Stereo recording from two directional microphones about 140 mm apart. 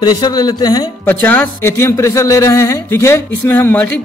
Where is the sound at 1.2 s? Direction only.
15° left (ahead or behind).